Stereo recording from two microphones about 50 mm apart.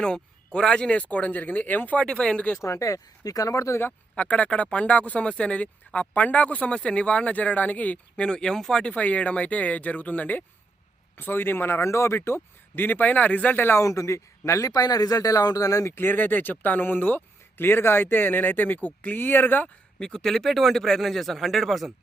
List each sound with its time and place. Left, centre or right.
0.0 s speech: centre; by 2.0 s left
2.0 s speech: left
2.6 s speech: left
4.1 s speech: left
8.8 s speech: left
11.2 s speech: left
11.9 s speech: left
13.7 s speech: left
15.9 s speech: left
19.6 s speech: centre